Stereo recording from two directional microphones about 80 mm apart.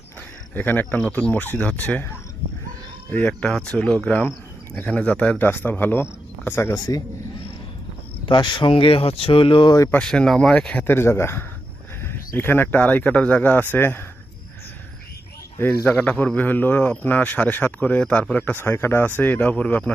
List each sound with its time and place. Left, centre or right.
0.5 s a man's voice: left
3.4 s speech: centre; by 6.7 s left
6.7 s a man's voice: left
8.3 s speech: left
10.0 s speech: centre
10.8 s a man's voice: left
15.5 s a man's voice: left
15.9 s a man's voice: centre